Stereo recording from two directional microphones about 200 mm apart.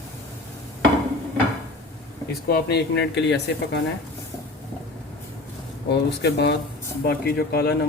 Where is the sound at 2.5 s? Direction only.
55° left (ahead or behind).